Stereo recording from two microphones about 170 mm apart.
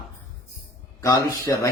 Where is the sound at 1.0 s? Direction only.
15° left (ahead or behind).